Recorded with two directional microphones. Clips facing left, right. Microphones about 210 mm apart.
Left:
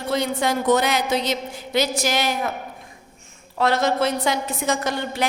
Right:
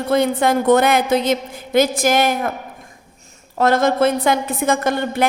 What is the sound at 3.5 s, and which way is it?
A woman's voice, 50° right (ahead or behind).